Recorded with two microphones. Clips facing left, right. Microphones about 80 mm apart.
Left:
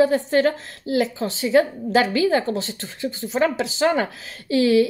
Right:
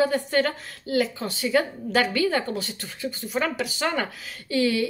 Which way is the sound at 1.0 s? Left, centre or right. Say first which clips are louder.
Left 3 dB; left.